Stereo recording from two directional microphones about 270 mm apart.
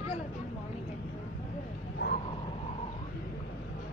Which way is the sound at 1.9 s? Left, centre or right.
Left.